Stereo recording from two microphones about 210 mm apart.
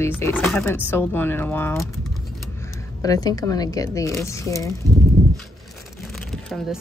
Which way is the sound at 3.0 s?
15° left (ahead or behind).